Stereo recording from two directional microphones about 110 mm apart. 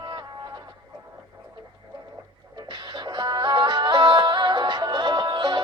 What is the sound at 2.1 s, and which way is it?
Music, 40° right (ahead or behind).